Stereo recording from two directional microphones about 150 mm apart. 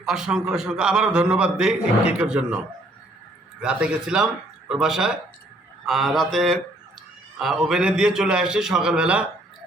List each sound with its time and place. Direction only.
0.0 s a man's voice: 5° right (ahead or behind)
3.6 s a man's voice: 5° right (ahead or behind)